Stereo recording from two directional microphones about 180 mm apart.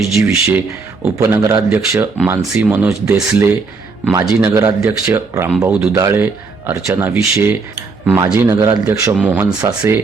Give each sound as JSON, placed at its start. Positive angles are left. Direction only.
{"t": 0.0, "sound": "speech", "side_deg": 0}
{"t": 1.3, "sound": "speech", "side_deg": -20}